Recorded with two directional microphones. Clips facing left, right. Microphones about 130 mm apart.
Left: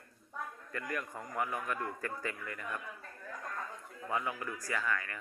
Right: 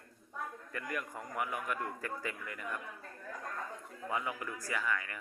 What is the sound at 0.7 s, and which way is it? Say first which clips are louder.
Speech: left 1 dB; 15° right (ahead or behind).